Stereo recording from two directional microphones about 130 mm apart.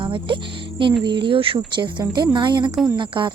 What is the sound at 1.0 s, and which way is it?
Speech, 40° right (ahead or behind).